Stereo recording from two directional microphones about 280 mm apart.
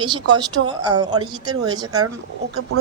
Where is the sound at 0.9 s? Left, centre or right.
Centre.